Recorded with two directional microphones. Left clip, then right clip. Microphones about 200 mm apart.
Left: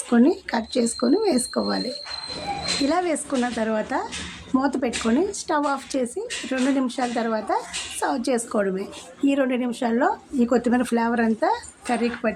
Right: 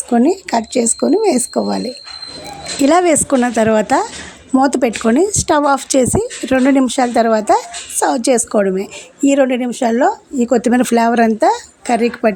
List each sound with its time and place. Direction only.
0.1 s speech: 25° right (ahead or behind)
2.8 s speech: 45° right (ahead or behind)